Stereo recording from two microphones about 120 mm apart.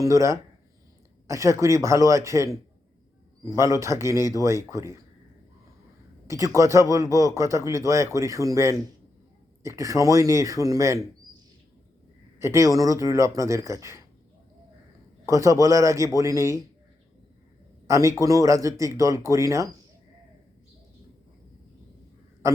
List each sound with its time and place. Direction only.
0.0 s speech: 25° right (ahead or behind)
6.2 s speech: 25° right (ahead or behind)
12.4 s speech: 25° right (ahead or behind)
15.3 s speech: 25° right (ahead or behind)
17.8 s speech: 25° right (ahead or behind)